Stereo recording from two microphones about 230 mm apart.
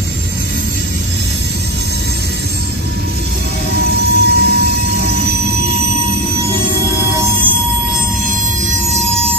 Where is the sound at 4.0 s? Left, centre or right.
Right.